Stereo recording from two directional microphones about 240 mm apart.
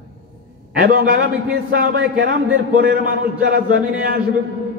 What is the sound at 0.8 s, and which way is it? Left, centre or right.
A man's voice, right.